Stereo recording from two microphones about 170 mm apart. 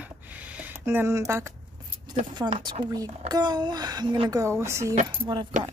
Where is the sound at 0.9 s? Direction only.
15° right (ahead or behind).